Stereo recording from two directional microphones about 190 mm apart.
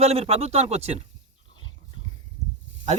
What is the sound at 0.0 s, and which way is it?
Speech, 35° right (ahead or behind).